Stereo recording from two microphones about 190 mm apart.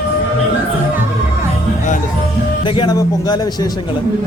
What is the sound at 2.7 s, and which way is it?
A man's voice, 25° left (ahead or behind).